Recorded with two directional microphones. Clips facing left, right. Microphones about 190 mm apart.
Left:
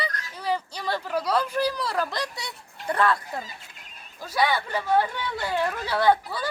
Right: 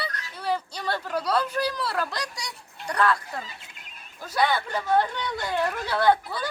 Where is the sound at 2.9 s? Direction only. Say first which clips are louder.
Even; 25° left (ahead or behind).